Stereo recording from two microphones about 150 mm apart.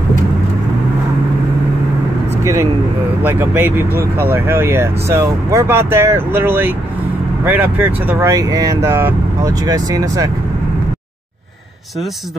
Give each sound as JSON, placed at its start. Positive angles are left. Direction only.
{"t": 2.4, "sound": "vehicle", "side_deg": -20}
{"t": 3.2, "sound": "speech", "side_deg": -15}